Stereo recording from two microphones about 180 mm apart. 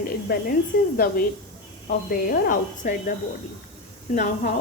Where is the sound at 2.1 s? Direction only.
55° left (ahead or behind).